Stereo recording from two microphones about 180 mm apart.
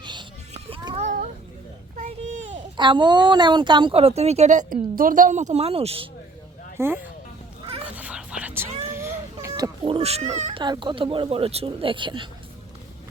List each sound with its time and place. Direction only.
0.0 s a sound: 25° right (ahead or behind)
2.0 s a sound: 45° right (ahead or behind)
2.7 s speech: 25° right (ahead or behind)
6.7 s speech: 10° right (ahead or behind)
7.9 s whispering: 5° right (ahead or behind)
8.9 s baby cry: 15° right (ahead or behind); by 10.6 s 40° right (ahead or behind)
10.6 s speech: 25° right (ahead or behind)